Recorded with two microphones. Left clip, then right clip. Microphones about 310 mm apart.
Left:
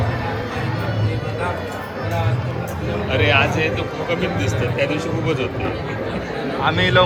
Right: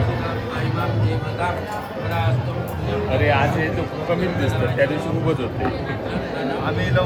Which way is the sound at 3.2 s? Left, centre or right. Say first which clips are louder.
Left 4 dB; centre.